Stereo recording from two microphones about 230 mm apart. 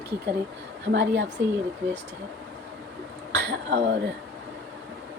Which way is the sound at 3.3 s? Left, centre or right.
Right.